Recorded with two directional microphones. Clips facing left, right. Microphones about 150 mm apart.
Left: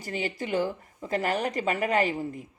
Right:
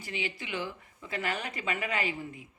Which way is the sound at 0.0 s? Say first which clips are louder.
Left 6 dB; 40° left (ahead or behind).